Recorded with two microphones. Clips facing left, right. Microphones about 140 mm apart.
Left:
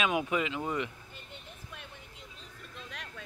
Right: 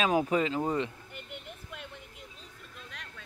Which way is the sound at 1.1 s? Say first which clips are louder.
Right 5 dB; 65° right (ahead or behind).